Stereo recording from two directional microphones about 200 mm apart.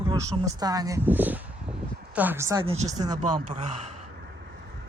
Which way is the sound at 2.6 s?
30° right (ahead or behind).